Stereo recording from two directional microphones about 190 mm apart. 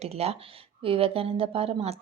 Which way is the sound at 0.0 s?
30° right (ahead or behind).